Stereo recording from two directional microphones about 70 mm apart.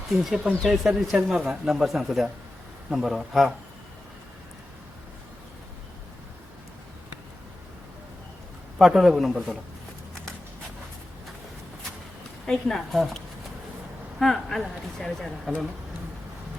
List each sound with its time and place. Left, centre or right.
0.1 s speech: centre
8.8 s speech: centre
12.5 s speech: centre